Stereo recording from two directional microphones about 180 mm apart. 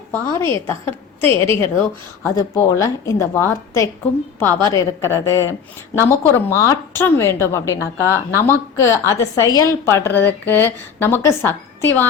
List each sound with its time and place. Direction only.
0.3 s a woman's voice: 15° left (ahead or behind)